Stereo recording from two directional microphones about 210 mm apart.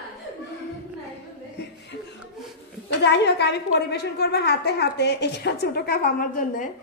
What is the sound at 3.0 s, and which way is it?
A woman's voice, 55° left (ahead or behind).